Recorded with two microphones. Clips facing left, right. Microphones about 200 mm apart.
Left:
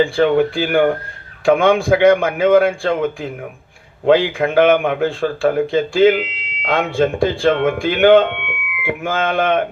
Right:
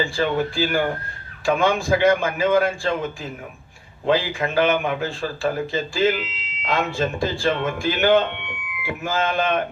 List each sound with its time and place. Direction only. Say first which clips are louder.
0.0 s a man's voice: left 8 dB; 55° left (ahead or behind)